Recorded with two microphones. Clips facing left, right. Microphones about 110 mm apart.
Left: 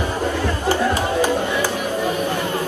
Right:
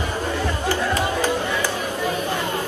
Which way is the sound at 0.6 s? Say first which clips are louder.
Left 4 dB; 15° left (ahead or behind).